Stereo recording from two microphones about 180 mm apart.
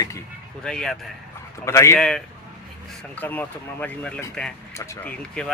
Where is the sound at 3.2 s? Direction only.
10° left (ahead or behind).